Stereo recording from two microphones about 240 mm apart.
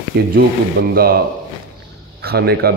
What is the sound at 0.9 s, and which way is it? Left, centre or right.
Speech, right.